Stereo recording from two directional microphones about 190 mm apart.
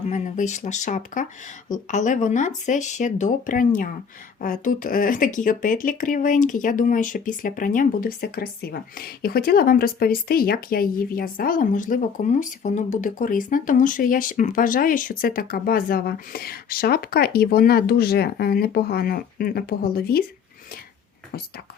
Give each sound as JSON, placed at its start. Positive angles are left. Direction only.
{"t": 0.1, "sound": "speech", "side_deg": 40}